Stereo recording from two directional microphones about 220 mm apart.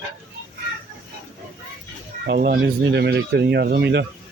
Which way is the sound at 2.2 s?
45° right (ahead or behind).